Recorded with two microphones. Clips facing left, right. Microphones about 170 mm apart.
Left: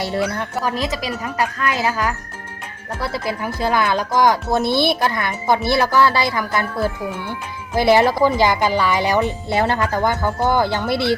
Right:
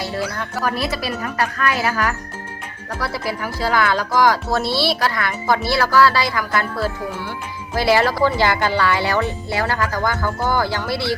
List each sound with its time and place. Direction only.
0.1 s a woman's voice: 25° left (ahead or behind)